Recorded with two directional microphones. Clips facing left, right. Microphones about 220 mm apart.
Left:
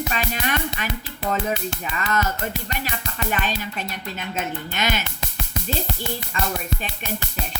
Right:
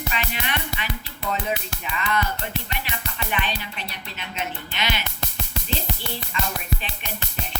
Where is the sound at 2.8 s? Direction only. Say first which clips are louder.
Left 4 dB; 45° left (ahead or behind).